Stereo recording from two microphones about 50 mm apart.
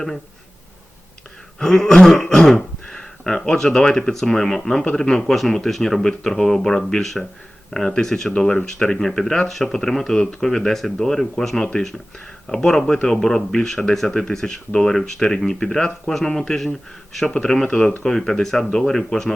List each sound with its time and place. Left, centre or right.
1.5 s speech: centre
17.7 s speech: left
18.0 s speech: centre